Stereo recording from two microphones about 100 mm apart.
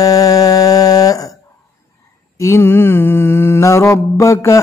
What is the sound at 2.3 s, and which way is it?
Mantra, 25° left (ahead or behind).